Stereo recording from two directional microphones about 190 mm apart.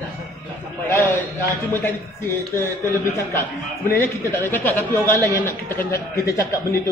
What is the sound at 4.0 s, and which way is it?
A man's voice, 10° left (ahead or behind).